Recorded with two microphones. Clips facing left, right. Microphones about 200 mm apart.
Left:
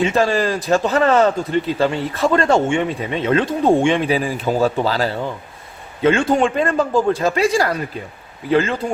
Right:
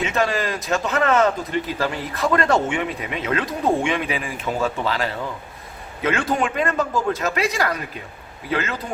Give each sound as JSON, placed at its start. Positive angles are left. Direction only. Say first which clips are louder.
{"t": 0.0, "sound": "a man's voice", "louder": "left 5 dB", "side_deg": 30}